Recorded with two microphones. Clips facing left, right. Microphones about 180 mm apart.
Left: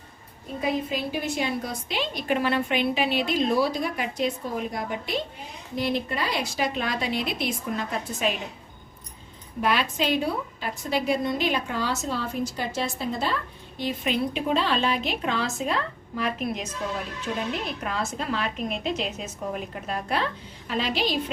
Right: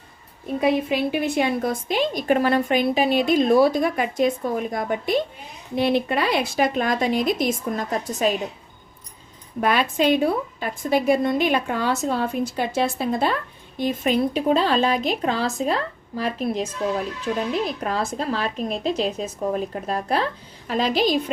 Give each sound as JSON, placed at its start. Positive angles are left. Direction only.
{"t": 0.6, "sound": "a woman's voice", "side_deg": -70}
{"t": 5.7, "sound": "a woman's voice", "side_deg": -65}
{"t": 9.6, "sound": "a woman's voice", "side_deg": -50}